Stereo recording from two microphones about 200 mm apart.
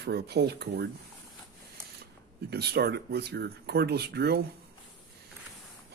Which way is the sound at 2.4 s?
55° right (ahead or behind).